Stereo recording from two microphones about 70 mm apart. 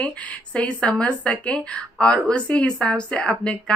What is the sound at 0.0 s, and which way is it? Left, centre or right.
Speech, centre.